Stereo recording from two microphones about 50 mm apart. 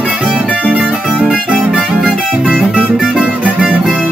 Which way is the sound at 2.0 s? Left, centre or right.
Centre.